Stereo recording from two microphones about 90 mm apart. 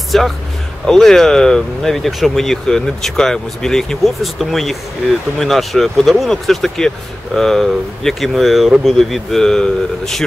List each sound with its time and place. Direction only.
0.1 s speech: 5° left (ahead or behind)